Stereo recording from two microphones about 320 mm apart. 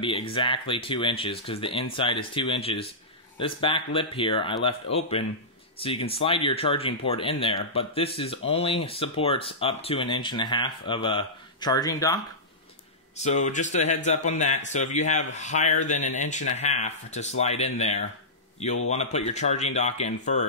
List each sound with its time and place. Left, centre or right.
0.0 s speech: centre
5.8 s speech: centre
13.2 s speech: left